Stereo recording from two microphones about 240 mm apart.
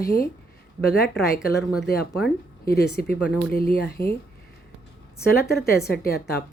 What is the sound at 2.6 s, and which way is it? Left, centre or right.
Speech, left.